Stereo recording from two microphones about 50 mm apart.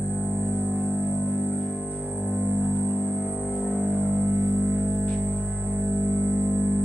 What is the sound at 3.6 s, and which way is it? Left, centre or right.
Music, right.